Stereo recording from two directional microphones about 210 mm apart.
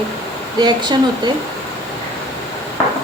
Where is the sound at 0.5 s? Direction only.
20° right (ahead or behind).